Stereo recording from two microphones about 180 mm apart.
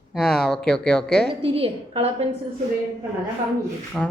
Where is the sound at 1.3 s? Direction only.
30° right (ahead or behind).